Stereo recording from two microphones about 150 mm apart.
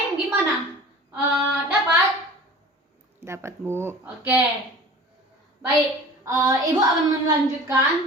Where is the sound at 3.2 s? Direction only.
20° right (ahead or behind).